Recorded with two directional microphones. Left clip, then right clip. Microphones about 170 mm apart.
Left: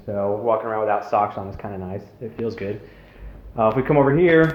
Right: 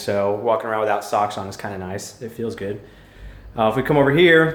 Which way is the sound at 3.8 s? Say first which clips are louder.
Right 3 dB; 20° right (ahead or behind).